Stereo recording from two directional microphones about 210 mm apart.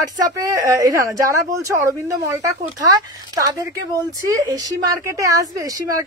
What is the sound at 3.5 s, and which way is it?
Speech, 15° right (ahead or behind).